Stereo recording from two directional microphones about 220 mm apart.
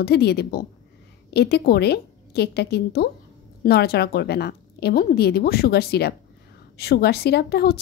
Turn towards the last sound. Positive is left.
turn(degrees=45)  # may be behind; listen again after turning